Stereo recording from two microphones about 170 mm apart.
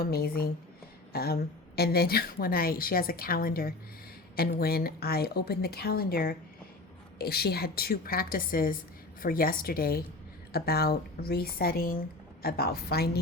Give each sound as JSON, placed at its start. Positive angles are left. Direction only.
{"t": 0.0, "sound": "a woman's voice", "side_deg": 65}